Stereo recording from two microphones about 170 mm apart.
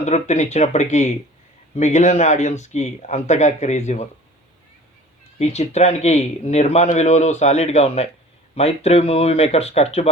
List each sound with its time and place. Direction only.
0.0 s speech: 40° left (ahead or behind)
5.4 s speech: 40° left (ahead or behind)